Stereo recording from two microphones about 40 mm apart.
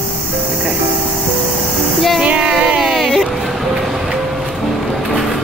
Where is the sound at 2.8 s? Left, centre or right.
Centre.